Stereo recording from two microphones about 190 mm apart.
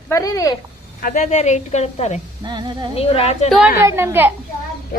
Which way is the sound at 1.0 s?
40° left (ahead or behind).